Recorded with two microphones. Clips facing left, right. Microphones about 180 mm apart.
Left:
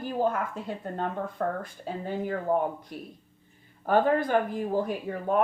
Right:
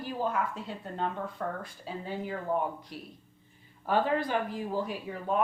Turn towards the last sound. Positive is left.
turn(degrees=50)  # may be behind; listen again after turning